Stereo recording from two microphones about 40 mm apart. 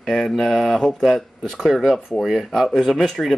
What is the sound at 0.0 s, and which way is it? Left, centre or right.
Speech, centre.